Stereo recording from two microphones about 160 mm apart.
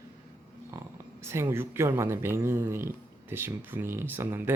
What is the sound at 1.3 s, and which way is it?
Speech, 15° right (ahead or behind).